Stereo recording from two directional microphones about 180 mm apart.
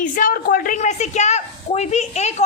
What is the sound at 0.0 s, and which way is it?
A woman's voice, 50° left (ahead or behind).